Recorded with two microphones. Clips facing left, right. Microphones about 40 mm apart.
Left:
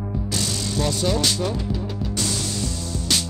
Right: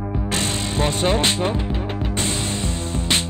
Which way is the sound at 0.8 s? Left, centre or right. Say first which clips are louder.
Right 3 dB; right.